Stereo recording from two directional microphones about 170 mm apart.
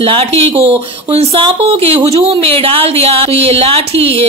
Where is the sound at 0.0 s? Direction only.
35° right (ahead or behind).